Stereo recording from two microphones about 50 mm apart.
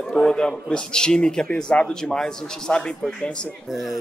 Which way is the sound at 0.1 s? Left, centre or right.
Centre.